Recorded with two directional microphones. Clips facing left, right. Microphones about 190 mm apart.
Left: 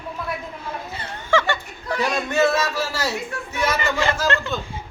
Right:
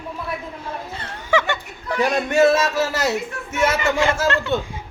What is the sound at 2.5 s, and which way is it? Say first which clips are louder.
Speech: right 4 dB; 25° right (ahead or behind).